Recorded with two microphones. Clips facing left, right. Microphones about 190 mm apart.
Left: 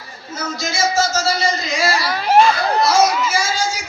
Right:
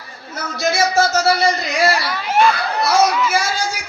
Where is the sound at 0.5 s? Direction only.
60° right (ahead or behind).